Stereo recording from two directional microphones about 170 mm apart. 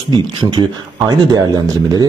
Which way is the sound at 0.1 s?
25° right (ahead or behind).